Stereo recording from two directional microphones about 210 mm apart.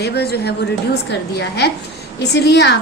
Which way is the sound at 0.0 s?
50° left (ahead or behind).